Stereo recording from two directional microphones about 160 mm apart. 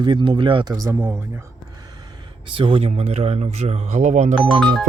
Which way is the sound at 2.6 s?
35° right (ahead or behind).